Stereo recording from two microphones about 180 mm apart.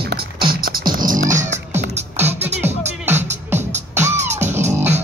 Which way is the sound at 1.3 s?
45° right (ahead or behind).